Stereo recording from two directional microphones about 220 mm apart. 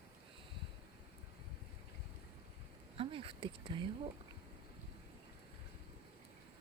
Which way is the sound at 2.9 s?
25° right (ahead or behind).